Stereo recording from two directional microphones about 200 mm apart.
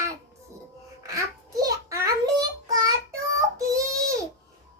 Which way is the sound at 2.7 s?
20° right (ahead or behind).